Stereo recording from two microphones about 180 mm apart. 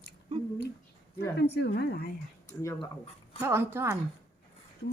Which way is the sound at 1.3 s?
70° left (ahead or behind).